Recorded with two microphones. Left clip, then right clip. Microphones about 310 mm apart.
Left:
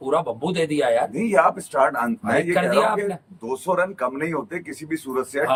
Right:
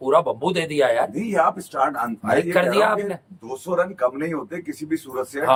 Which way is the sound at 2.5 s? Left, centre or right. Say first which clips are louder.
Right 1 dB; centre.